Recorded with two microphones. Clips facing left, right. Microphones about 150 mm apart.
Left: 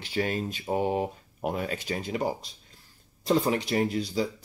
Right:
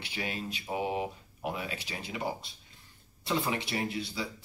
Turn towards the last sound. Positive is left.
turn(degrees=40)  # may be behind; listen again after turning